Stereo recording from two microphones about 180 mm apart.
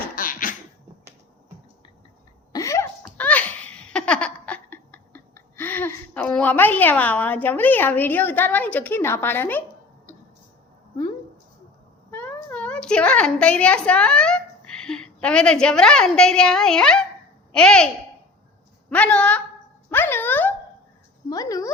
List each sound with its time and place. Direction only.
0.2 s cough: 50° left (ahead or behind)
2.5 s cough: 20° left (ahead or behind)
3.2 s laughter: 10° left (ahead or behind)
12.1 s a sound: 10° left (ahead or behind)
17.5 s a woman's voice: 5° left (ahead or behind)
18.9 s a woman's voice: 5° left (ahead or behind)
19.9 s a sound: 10° left (ahead or behind)
21.2 s speech: 20° left (ahead or behind)